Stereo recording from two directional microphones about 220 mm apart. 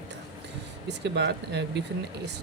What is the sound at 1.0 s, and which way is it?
Speech, 50° right (ahead or behind).